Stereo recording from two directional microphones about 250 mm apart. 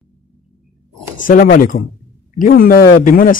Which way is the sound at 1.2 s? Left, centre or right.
Left.